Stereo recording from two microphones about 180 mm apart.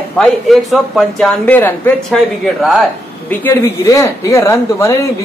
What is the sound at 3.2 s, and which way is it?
A man's voice, 15° left (ahead or behind).